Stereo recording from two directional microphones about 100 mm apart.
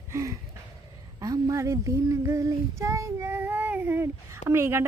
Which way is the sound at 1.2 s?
35° right (ahead or behind).